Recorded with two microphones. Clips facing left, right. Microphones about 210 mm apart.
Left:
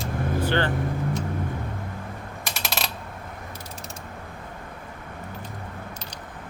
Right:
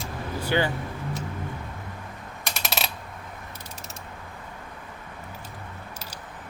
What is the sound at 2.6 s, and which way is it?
Coin, 5° right (ahead or behind).